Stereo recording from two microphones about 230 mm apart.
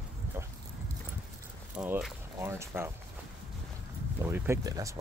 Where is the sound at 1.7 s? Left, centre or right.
Centre.